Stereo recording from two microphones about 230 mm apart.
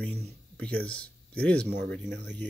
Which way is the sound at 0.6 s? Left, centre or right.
Centre.